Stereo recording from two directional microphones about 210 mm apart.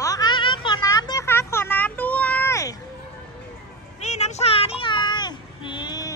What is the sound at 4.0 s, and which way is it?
Child singing, 30° left (ahead or behind).